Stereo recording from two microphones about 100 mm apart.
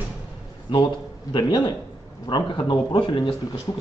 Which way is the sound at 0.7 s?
55° left (ahead or behind).